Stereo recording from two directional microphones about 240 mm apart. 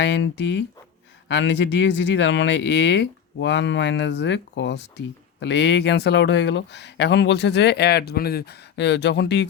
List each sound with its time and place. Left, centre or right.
0.0 s speech: left